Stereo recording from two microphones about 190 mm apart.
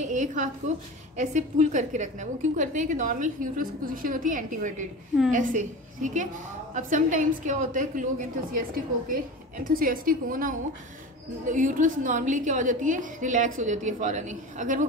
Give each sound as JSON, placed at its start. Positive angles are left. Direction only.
{"t": 0.0, "sound": "a sound", "side_deg": -40}
{"t": 1.1, "sound": "a woman's voice", "side_deg": -40}
{"t": 9.8, "sound": "a woman's voice", "side_deg": -50}